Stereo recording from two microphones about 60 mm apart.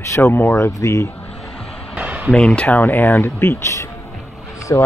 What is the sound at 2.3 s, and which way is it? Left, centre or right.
Speech, centre.